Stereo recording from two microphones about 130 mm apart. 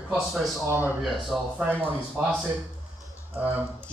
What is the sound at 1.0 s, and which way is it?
Speech, centre (ahead or behind).